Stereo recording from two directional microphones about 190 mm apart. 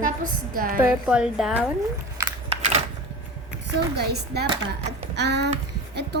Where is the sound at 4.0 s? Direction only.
60° right (ahead or behind).